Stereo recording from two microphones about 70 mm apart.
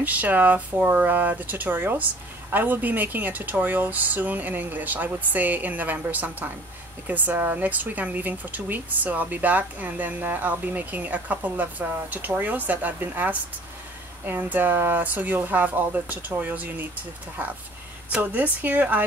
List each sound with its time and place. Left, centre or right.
0.0 s speech: right
18.1 s speech: right